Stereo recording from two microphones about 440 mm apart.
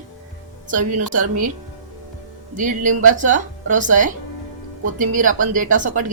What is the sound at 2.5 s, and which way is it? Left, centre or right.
A woman's voice, centre.